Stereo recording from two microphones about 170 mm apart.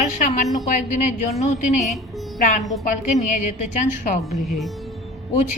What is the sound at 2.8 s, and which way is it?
A woman's voice, 45° left (ahead or behind).